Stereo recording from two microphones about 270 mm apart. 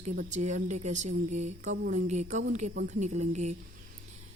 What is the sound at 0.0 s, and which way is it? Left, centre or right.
Speech, right.